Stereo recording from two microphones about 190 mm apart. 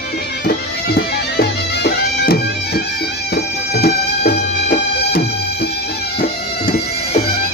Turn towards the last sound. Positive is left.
turn(degrees=55)  # may be behind; listen again after turning